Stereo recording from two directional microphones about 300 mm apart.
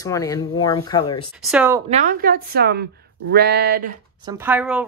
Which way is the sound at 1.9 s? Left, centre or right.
Right.